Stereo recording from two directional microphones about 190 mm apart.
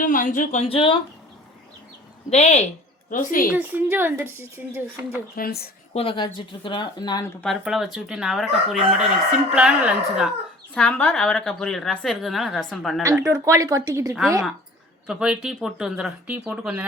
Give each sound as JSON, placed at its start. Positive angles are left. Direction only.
{"t": 0.0, "sound": "speech", "side_deg": 45}
{"t": 2.3, "sound": "speech", "side_deg": 35}
{"t": 3.1, "sound": "a woman's voice", "side_deg": 45}
{"t": 3.5, "sound": "speech", "side_deg": -10}
{"t": 5.4, "sound": "speech", "side_deg": 55}
{"t": 5.9, "sound": "speech", "side_deg": 30}
{"t": 7.4, "sound": "speech", "side_deg": 0}
{"t": 10.8, "sound": "speech", "side_deg": 5}
{"t": 13.0, "sound": "speech", "side_deg": -15}
{"t": 15.0, "sound": "speech", "side_deg": -5}